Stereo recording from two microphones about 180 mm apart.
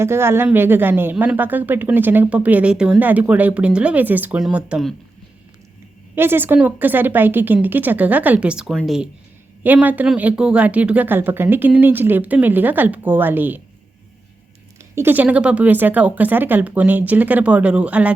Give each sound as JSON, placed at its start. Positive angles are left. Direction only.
{"t": 0.0, "sound": "a woman's voice", "side_deg": -15}
{"t": 6.1, "sound": "a woman's voice", "side_deg": -10}
{"t": 14.9, "sound": "a woman's voice", "side_deg": -10}